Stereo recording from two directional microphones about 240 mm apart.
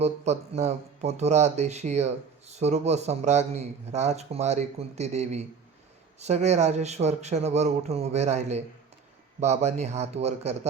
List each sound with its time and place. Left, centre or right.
0.0 s speech: right